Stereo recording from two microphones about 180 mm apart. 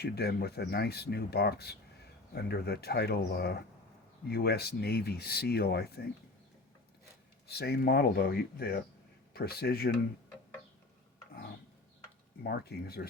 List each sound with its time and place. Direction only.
0.0 s speech: 65° left (ahead or behind)
7.4 s speech: 65° left (ahead or behind)
12.4 s speech: 60° left (ahead or behind)